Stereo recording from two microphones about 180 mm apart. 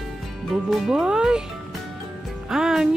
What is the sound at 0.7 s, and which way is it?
Music, 5° right (ahead or behind).